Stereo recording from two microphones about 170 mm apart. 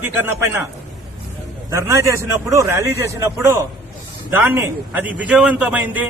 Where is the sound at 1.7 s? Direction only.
15° right (ahead or behind).